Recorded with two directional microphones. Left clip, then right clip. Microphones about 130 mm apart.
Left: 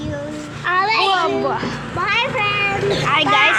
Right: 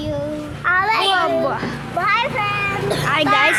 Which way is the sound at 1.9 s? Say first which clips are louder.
Right 1 dB; 30° right (ahead or behind).